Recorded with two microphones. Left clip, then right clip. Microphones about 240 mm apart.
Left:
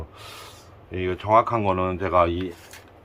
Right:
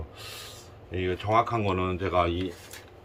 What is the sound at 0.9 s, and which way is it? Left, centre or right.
Speech, centre.